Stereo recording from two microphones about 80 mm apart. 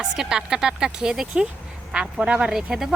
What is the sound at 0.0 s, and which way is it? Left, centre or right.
Speech, centre.